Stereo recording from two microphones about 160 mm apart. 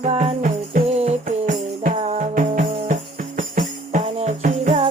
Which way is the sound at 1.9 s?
40° right (ahead or behind).